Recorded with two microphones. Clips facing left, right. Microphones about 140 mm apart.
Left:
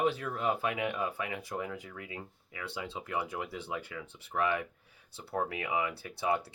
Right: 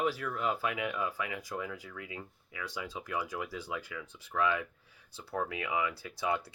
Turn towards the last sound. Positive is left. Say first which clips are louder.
# left 2 dB
turn(degrees=30)  # may be behind; listen again after turning